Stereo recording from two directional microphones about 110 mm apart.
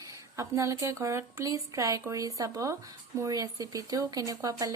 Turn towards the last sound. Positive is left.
turn(degrees=-35)  # may be behind; listen again after turning